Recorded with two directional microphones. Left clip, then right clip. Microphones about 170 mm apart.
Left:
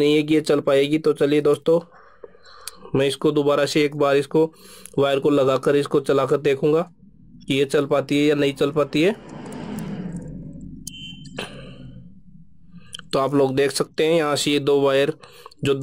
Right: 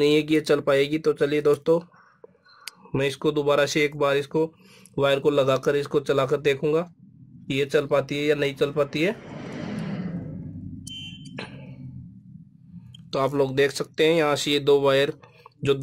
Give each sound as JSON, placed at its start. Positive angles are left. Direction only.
{"t": 0.0, "sound": "speech", "side_deg": 25}
{"t": 11.3, "sound": "a sound", "side_deg": 30}
{"t": 12.9, "sound": "speech", "side_deg": 30}